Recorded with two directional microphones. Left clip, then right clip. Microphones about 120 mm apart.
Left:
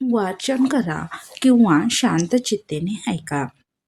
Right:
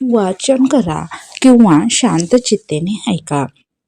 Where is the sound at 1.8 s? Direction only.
30° right (ahead or behind).